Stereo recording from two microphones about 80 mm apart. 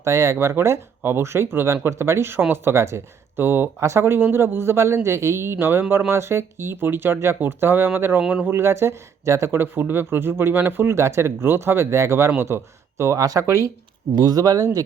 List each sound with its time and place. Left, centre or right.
0.0 s speech: right